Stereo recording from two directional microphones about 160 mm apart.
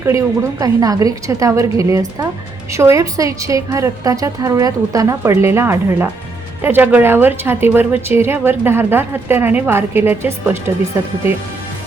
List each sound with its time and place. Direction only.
0.0 s a woman's voice: 20° right (ahead or behind)